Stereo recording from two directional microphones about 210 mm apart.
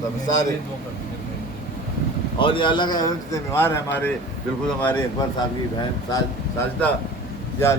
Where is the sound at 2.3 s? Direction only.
25° left (ahead or behind); by 5.2 s 10° left (ahead or behind).